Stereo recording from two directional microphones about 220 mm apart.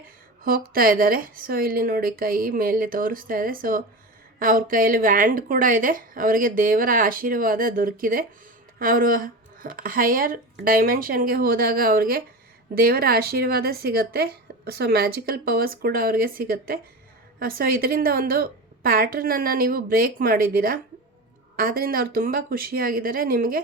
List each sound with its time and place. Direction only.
0.0 s a woman's voice: 40° right (ahead or behind)